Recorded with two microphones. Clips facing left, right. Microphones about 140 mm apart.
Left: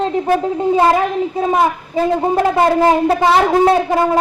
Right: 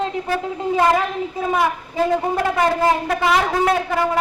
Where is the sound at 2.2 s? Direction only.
30° left (ahead or behind).